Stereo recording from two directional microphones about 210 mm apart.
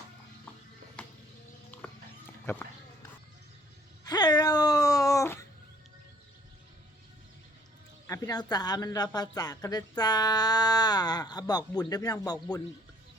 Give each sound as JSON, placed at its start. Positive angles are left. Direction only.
{"t": 1.0, "sound": "music", "side_deg": 5}
{"t": 1.7, "sound": "horse", "side_deg": 10}
{"t": 4.0, "sound": "a sound", "side_deg": 20}
{"t": 8.0, "sound": "speech", "side_deg": 15}